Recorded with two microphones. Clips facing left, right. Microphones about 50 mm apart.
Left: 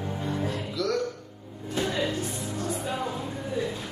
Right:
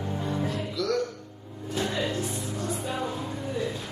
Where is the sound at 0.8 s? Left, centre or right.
Centre.